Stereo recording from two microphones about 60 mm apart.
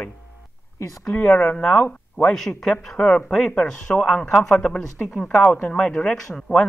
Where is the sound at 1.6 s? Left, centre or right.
Centre.